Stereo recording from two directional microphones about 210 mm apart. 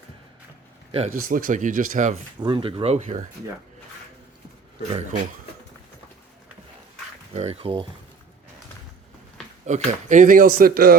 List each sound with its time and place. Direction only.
0.9 s speech: 30° right (ahead or behind)
1.1 s speech: 40° right (ahead or behind)
2.4 s speech: 25° right (ahead or behind)
7.3 s speech: 30° right (ahead or behind)
9.6 s speech: 35° right (ahead or behind)